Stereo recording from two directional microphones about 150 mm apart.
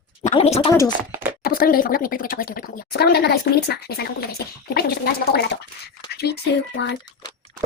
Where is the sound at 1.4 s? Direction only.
75° left (ahead or behind); by 5.6 s 90° left.